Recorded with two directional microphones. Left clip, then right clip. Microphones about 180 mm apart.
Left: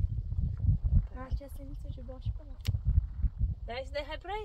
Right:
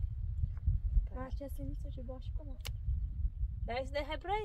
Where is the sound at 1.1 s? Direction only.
10° left (ahead or behind).